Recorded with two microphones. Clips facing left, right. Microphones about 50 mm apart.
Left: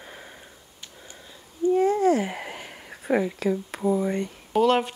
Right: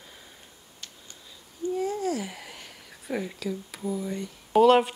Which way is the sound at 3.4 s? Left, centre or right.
Left.